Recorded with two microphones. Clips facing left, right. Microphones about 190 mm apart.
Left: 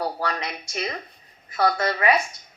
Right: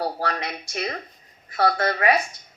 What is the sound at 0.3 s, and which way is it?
A woman's voice, 55° right (ahead or behind).